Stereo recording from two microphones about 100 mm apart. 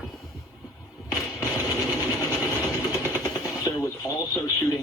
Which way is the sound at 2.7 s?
35° left (ahead or behind).